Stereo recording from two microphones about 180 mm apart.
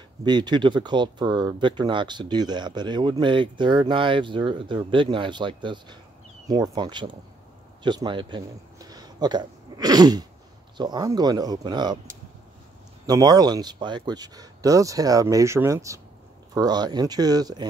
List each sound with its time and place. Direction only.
0.2 s speech: 25° right (ahead or behind)
13.0 s speech: 20° right (ahead or behind)